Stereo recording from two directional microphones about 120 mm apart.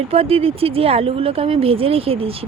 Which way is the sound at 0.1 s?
55° right (ahead or behind).